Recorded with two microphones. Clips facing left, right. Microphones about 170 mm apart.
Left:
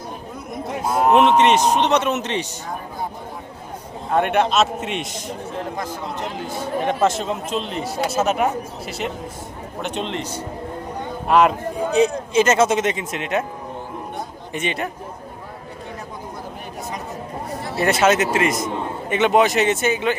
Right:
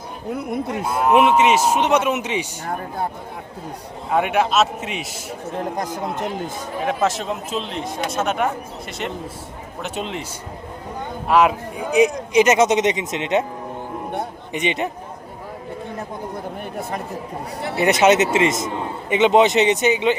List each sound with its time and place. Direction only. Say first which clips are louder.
0.3 s speech: right 12 dB; 65° right (ahead or behind)
1.1 s speech: even; 10° right (ahead or behind)
4.1 s speech: even; 5° right (ahead or behind)
5.7 s a man's voice: right 3 dB; 45° right (ahead or behind)
6.8 s speech: left 1 dB; centre (ahead or behind)
9.8 s speech: left 1 dB; 5° right (ahead or behind)
11.3 s speech: even; 5° right (ahead or behind); by 13.4 s 20° right (ahead or behind)
14.5 s speech: right 2 dB; 20° right (ahead or behind)
17.7 s speech: right 2 dB; 20° right (ahead or behind)